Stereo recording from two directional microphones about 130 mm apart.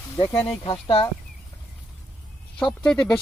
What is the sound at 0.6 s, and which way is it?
Speech, 40° left (ahead or behind).